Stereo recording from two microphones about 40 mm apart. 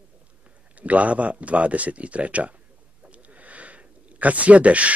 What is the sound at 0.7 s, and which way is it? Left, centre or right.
Speech, right.